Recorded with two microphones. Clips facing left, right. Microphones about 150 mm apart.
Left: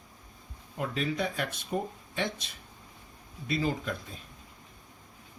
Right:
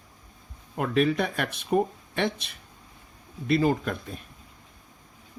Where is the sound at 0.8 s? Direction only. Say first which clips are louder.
Right 7 dB; 65° right (ahead or behind).